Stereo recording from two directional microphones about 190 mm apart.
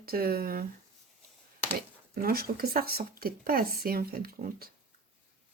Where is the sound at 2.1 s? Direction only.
55° right (ahead or behind).